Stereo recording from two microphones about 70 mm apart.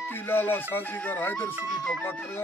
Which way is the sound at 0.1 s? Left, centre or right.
Left.